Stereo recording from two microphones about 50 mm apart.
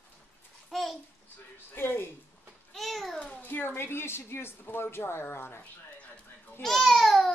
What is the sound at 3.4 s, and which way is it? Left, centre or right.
A woman's voice, left.